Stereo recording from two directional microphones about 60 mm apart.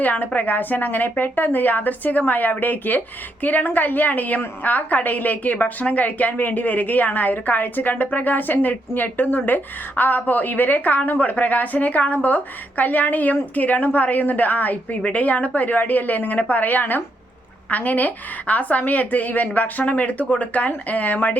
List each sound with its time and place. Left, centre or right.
0.0 s a woman's voice: left